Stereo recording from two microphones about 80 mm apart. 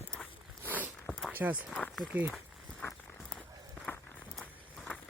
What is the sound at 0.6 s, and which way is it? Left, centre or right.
Zipper, right.